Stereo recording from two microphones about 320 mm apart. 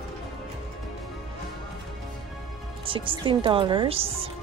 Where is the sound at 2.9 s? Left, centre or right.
Centre.